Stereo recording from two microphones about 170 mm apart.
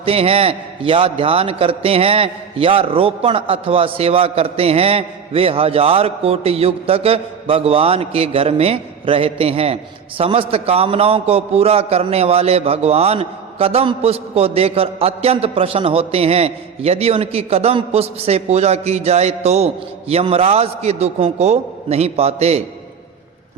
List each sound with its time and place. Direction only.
0.0 s a man's voice: 35° right (ahead or behind)